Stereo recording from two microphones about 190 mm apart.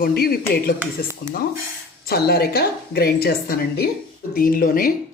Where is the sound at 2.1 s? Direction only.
55° left (ahead or behind).